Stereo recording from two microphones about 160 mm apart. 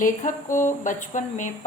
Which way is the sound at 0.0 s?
55° left (ahead or behind).